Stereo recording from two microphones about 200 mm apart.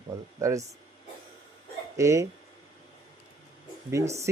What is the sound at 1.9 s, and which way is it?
Speech, 15° right (ahead or behind).